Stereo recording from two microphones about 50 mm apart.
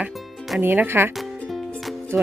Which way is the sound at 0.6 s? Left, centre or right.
Right.